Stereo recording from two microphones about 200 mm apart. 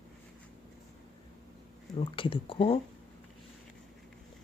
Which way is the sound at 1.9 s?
25° left (ahead or behind).